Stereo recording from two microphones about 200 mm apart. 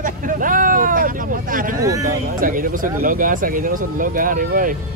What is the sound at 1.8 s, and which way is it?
Speech, 15° right (ahead or behind).